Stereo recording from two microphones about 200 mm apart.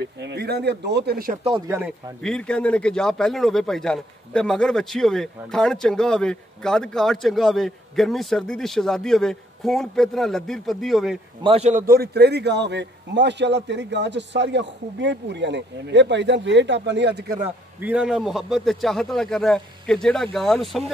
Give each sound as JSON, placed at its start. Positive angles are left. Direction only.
{"t": 0.0, "sound": "a man's voice", "side_deg": -55}
{"t": 2.2, "sound": "a man's voice", "side_deg": 5}
{"t": 11.4, "sound": "a man's voice", "side_deg": -30}
{"t": 11.8, "sound": "a man's voice", "side_deg": -50}
{"t": 17.7, "sound": "a man's voice", "side_deg": -5}